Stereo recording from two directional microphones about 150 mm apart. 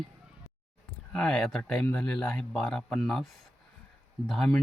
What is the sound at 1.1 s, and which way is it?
Speech, 5° left (ahead or behind).